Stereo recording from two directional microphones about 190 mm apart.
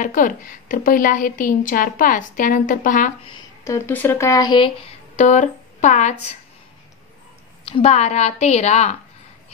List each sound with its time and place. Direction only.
0.0 s a woman's voice: 45° left (ahead or behind)
3.6 s speech: 15° left (ahead or behind); by 6.1 s 40° left (ahead or behind)
7.6 s a woman's voice: 30° left (ahead or behind)